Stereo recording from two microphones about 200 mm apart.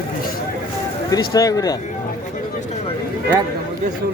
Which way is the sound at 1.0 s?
15° left (ahead or behind).